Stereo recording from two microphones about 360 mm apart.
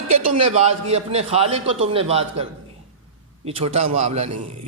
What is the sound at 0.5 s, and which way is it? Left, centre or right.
A man's voice, centre.